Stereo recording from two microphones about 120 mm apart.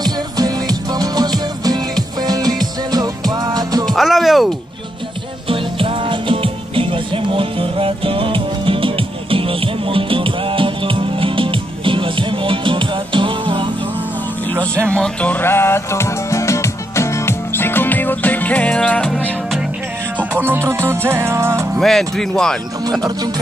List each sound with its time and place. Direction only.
0.0 s music: 35° right (ahead or behind)
3.8 s music: centre (ahead or behind)
5.5 s music: 50° right (ahead or behind)
14.9 s music: 10° left (ahead or behind)
20.2 s music: 20° right (ahead or behind)
21.7 s speech: centre (ahead or behind)
22.8 s music: 35° right (ahead or behind)